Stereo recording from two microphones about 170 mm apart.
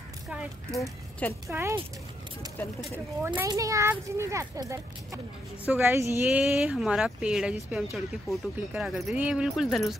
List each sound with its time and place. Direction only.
1.5 s speech: 15° right (ahead or behind)
2.8 s speech: 10° right (ahead or behind)
3.4 s a child's voice: 20° right (ahead or behind); by 9.9 s centre (ahead or behind)